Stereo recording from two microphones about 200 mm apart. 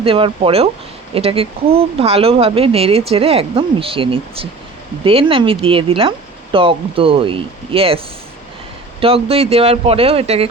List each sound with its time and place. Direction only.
0.0 s speech: 25° right (ahead or behind)